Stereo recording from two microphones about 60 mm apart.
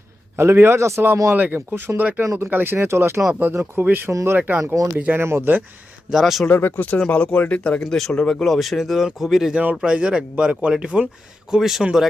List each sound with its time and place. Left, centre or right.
0.3 s speech: right
1.3 s speech: right
1.5 s speech: right
2.0 s speech: right
2.2 s speech: right
2.5 s speech: right
3.8 s speech: right
4.6 s speech: right
5.1 s speech: right
6.1 s speech: centre
6.5 s speech: left
7.1 s speech: centre
9.8 s speech: centre